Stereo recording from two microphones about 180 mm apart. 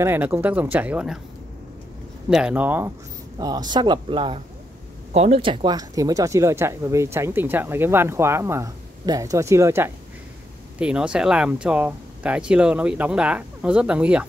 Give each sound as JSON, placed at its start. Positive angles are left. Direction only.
{"t": 0.0, "sound": "speech", "side_deg": -10}
{"t": 2.2, "sound": "speech", "side_deg": -5}
{"t": 3.3, "sound": "speech", "side_deg": -20}